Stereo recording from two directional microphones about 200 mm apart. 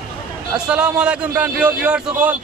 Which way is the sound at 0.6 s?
5° right (ahead or behind).